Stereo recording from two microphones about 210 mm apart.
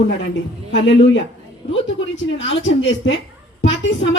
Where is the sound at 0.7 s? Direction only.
60° left (ahead or behind).